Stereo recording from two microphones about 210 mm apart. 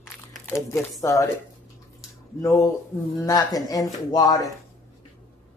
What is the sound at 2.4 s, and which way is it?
Speech, 15° left (ahead or behind).